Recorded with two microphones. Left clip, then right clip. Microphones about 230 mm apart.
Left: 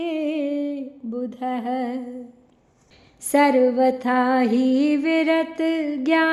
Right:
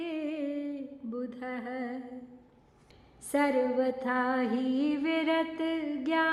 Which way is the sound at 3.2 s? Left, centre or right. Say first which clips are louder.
Left 11 dB; left.